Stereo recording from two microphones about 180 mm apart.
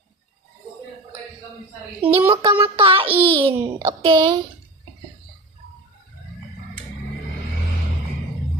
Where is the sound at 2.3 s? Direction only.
30° right (ahead or behind).